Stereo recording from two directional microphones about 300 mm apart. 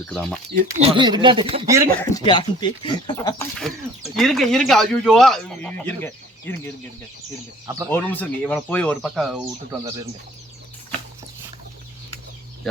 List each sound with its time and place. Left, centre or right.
0.0 s speech: centre
0.5 s speech: centre
2.1 s speech: centre
4.1 s speech: centre
7.9 s speech: centre